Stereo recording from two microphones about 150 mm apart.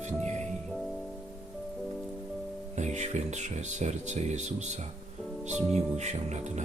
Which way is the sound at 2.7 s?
50° right (ahead or behind).